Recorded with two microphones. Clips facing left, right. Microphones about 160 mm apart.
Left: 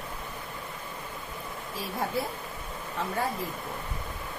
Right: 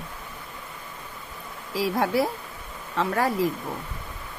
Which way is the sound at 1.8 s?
90° right.